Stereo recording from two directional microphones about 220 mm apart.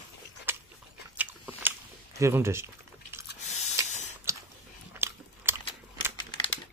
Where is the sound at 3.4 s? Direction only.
30° left (ahead or behind).